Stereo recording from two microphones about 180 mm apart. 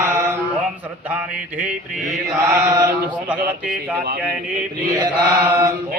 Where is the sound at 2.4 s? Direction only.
15° right (ahead or behind).